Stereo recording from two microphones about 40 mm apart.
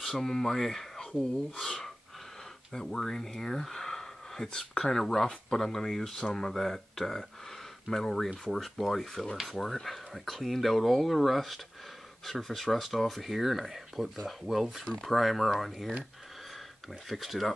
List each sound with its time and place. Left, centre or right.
0.0 s speech: centre
1.6 s gasp: centre
2.7 s speech: centre
17.1 s speech: centre